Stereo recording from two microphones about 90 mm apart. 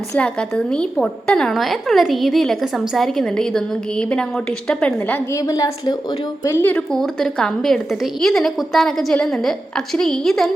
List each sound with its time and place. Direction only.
0.1 s a woman's voice: 10° left (ahead or behind)
4.9 s a woman's voice: 20° left (ahead or behind)
5.3 s a woman's voice: 40° left (ahead or behind)
6.4 s a woman's voice: 30° left (ahead or behind)
6.7 s a woman's voice: 5° left (ahead or behind)